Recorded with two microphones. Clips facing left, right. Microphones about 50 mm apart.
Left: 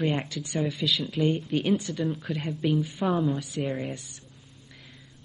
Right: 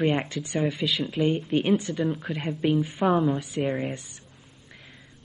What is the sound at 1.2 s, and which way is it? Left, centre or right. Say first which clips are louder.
A woman's voice: right 2 dB; centre.